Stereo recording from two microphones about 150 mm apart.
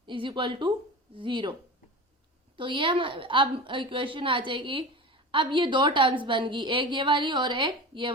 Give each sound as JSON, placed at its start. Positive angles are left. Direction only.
{"t": 0.0, "sound": "a woman's voice", "side_deg": -35}
{"t": 2.6, "sound": "a woman's voice", "side_deg": -35}